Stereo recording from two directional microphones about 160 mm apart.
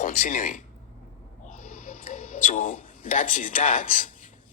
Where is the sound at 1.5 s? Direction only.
50° left (ahead or behind).